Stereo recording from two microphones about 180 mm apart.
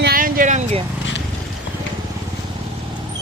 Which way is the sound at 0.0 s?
55° right (ahead or behind).